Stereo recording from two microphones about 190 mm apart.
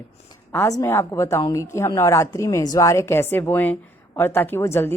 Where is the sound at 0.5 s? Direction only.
15° left (ahead or behind).